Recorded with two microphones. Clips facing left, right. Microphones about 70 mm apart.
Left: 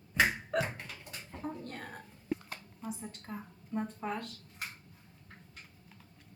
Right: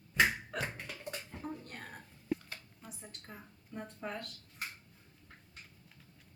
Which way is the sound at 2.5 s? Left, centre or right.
Centre.